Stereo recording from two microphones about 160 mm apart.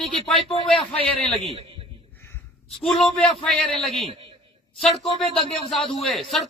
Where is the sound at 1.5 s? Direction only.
35° right (ahead or behind).